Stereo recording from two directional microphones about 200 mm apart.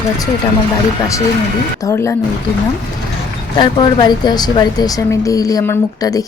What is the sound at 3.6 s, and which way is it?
Speech, 20° left (ahead or behind).